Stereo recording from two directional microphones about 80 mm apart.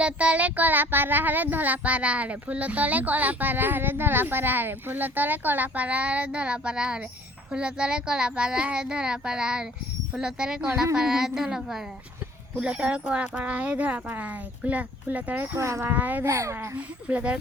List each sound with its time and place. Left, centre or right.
0.0 s speech: centre
15.5 s a child's voice: right
15.9 s speech: right
16.2 s a child's voice: right
16.7 s speech: centre